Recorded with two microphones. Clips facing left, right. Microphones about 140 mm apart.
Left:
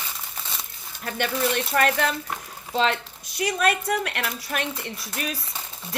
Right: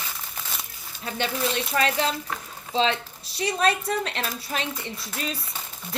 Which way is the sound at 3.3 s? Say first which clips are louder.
Even; 30° right (ahead or behind).